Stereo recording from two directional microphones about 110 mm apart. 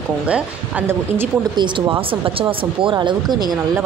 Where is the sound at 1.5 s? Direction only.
45° right (ahead or behind).